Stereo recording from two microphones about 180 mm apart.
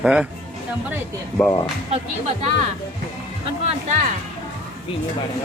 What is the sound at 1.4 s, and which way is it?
Speech, 5° left (ahead or behind).